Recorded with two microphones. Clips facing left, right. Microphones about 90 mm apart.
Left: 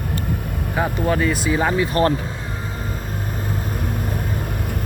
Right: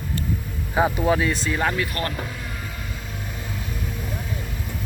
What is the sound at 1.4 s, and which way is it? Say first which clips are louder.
Speech: left 4 dB; 10° left (ahead or behind).